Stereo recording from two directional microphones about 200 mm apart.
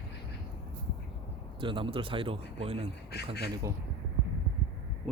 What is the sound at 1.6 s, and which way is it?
A man's voice, 25° right (ahead or behind).